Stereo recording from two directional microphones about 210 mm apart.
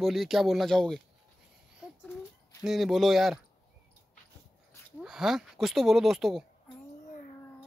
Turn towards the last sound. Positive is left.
turn(degrees=0)  # may be behind; listen again after turning